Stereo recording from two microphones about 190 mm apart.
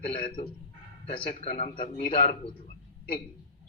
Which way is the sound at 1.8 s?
50° left (ahead or behind).